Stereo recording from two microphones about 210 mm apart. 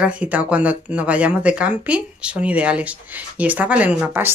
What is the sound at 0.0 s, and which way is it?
Speech, 5° right (ahead or behind).